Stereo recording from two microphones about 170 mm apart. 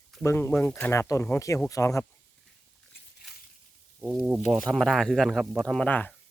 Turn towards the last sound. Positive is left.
turn(degrees=10)  # may be behind; listen again after turning